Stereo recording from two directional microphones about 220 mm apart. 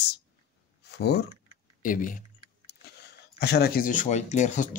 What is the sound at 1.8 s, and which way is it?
Speech, 35° left (ahead or behind).